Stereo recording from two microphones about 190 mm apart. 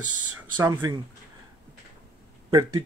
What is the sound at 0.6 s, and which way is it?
Speech, 15° right (ahead or behind).